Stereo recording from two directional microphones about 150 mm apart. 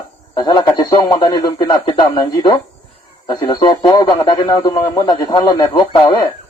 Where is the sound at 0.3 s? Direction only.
30° left (ahead or behind).